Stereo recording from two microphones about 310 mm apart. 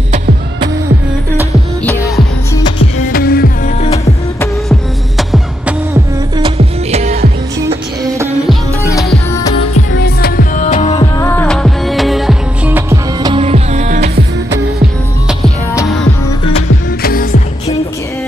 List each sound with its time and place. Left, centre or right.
1.9 s music: centre
3.1 s music: left
4.4 s music: centre; by 7.2 s right
8.8 s music: centre
9.8 s music: left
11.1 s music: centre; by 14.2 s right
15.2 s music: centre
17.0 s music: left